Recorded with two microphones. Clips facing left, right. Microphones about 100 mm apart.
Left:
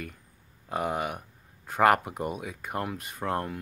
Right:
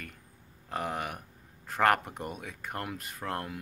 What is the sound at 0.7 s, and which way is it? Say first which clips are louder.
Speech: left 4 dB; centre (ahead or behind).